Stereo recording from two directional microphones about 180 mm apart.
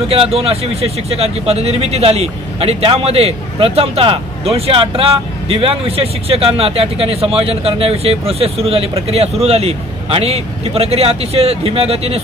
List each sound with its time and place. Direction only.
0.1 s speech: 30° right (ahead or behind)